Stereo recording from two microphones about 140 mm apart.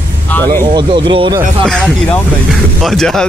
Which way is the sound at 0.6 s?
30° right (ahead or behind).